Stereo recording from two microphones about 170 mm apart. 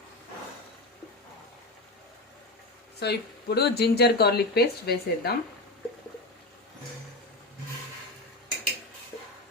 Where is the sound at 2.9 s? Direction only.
75° left (ahead or behind).